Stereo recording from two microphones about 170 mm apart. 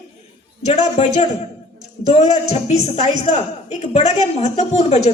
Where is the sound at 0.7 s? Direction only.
40° left (ahead or behind).